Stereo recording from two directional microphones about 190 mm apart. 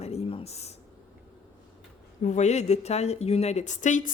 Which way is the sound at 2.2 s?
40° left (ahead or behind).